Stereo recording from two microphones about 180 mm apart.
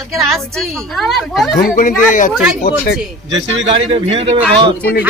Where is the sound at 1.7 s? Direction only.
45° left (ahead or behind).